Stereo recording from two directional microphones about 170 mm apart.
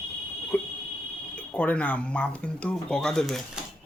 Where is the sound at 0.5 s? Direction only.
15° left (ahead or behind).